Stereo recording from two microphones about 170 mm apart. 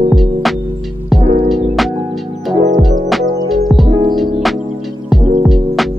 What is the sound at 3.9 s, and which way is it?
Music, 25° right (ahead or behind).